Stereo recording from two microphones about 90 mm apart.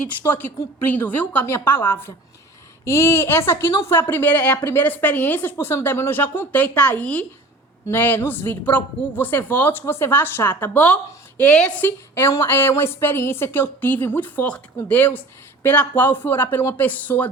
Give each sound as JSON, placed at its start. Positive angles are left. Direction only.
{"t": 0.2, "sound": "a woman's voice", "side_deg": 20}